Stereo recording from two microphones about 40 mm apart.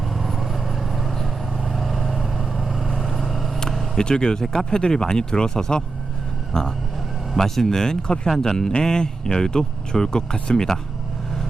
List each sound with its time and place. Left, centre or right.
0.1 s vehicle: centre
3.6 s vehicle: centre
4.0 s speech: centre